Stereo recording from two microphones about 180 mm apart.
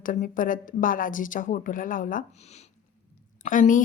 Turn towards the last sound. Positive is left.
turn(degrees=45)  # may be behind; listen again after turning